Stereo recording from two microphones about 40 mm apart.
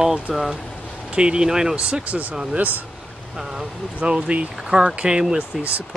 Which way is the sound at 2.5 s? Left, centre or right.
Right.